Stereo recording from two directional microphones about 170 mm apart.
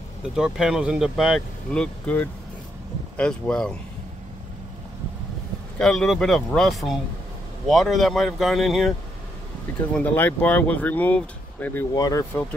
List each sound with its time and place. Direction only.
0.4 s speech: 5° right (ahead or behind)
5.8 s speech: 5° left (ahead or behind)
9.9 s speech: 10° left (ahead or behind)
11.9 s speech: 20° left (ahead or behind)